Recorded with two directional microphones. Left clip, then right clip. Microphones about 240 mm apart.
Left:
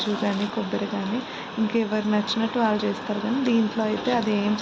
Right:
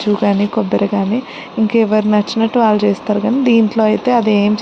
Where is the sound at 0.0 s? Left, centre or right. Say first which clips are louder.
Right 10 dB; right.